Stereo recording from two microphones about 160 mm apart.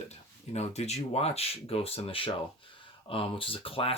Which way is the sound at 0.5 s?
45° left (ahead or behind).